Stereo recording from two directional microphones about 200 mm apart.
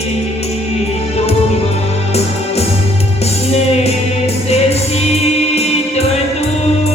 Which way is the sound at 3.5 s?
30° left (ahead or behind).